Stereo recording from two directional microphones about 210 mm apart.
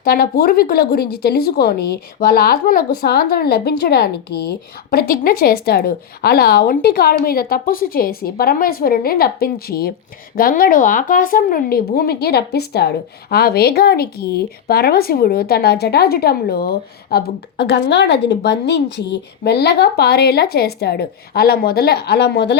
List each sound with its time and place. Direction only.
0.0 s speech: 45° left (ahead or behind)